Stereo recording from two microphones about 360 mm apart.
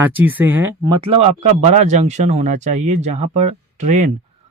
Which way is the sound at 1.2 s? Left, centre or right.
Centre.